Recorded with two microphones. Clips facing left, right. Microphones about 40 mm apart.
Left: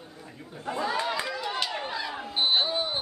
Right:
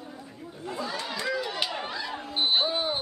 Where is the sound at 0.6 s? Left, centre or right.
Centre.